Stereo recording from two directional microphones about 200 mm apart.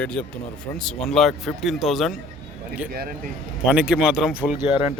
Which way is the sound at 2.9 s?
50° right (ahead or behind).